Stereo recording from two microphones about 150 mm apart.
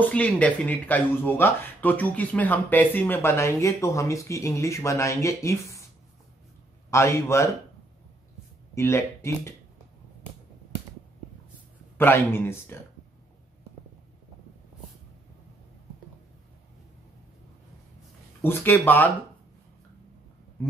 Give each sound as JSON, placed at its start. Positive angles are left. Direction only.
{"t": 0.0, "sound": "speech", "side_deg": 10}
{"t": 6.9, "sound": "a man's voice", "side_deg": 20}
{"t": 8.7, "sound": "speech", "side_deg": 20}
{"t": 12.0, "sound": "speech", "side_deg": 15}
{"t": 18.4, "sound": "speech", "side_deg": 15}